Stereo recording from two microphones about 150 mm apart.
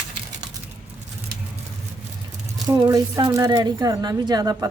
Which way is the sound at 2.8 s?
25° right (ahead or behind).